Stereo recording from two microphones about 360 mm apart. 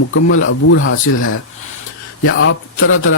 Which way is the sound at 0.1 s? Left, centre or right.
Left.